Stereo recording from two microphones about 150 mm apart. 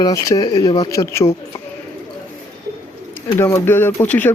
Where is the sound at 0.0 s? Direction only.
25° left (ahead or behind).